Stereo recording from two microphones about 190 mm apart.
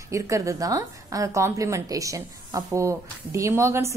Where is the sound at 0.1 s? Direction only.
15° right (ahead or behind).